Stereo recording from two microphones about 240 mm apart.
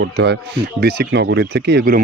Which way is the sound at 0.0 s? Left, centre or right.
Right.